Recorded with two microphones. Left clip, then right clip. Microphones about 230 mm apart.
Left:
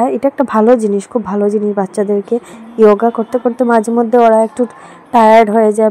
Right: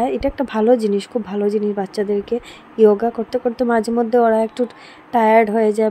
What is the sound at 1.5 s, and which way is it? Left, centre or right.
A woman's voice, centre.